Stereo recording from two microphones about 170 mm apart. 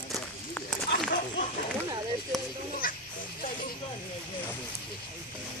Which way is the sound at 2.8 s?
55° left (ahead or behind).